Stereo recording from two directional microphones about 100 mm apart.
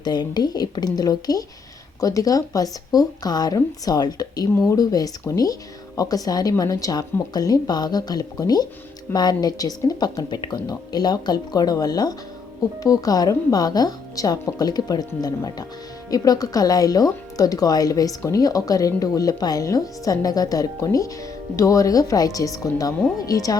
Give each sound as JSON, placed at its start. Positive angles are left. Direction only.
{"t": 0.0, "sound": "speech", "side_deg": 45}